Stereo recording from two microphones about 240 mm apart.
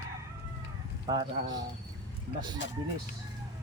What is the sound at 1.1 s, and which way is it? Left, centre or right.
Speech, centre.